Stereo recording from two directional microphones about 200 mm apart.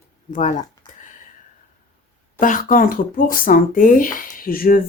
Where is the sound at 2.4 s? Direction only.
40° left (ahead or behind).